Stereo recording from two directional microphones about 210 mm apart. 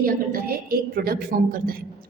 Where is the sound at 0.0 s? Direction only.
45° right (ahead or behind).